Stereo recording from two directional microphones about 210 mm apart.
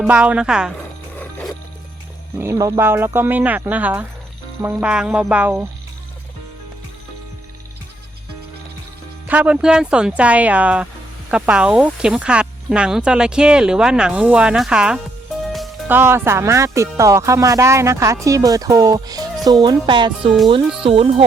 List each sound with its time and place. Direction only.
0.0 s speech: 5° right (ahead or behind)
2.4 s speech: 15° right (ahead or behind)
9.2 s speech: 5° right (ahead or behind); by 21.2 s 25° right (ahead or behind)